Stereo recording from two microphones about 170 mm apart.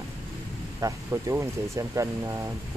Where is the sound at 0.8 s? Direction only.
20° right (ahead or behind).